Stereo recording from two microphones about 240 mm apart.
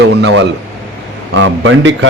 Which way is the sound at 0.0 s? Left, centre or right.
Right.